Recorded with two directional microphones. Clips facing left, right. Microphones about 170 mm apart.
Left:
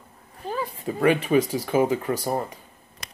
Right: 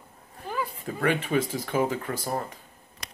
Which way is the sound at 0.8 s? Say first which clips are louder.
Left 7 dB; 10° left (ahead or behind).